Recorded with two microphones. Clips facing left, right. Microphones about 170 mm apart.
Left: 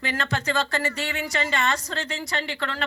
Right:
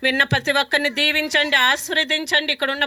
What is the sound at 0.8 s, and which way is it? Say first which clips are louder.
Speech: right 5 dB; 85° right.